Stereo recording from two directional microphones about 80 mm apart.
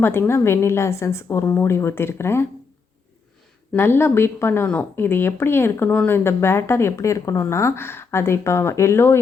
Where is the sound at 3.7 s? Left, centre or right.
Left.